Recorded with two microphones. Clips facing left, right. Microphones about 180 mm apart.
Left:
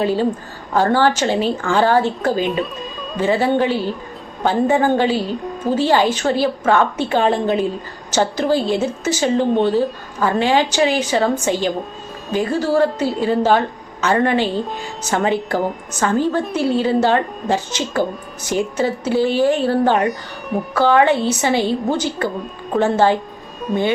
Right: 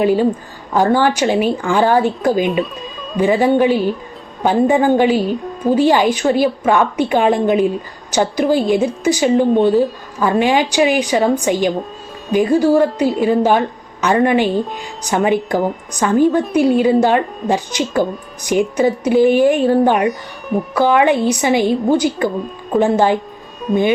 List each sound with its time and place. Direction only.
0.0 s a woman's voice: 15° right (ahead or behind)
20.1 s speech: centre (ahead or behind)
20.7 s a woman's voice: 15° right (ahead or behind)